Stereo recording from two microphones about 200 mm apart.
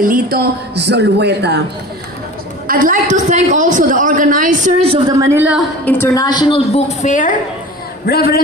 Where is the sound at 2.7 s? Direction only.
45° right (ahead or behind).